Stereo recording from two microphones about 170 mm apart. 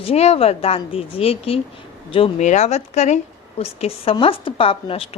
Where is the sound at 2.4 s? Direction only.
45° left (ahead or behind).